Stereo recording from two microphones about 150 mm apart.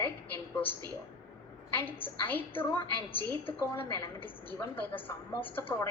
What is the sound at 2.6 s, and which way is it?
Speech, 35° left (ahead or behind).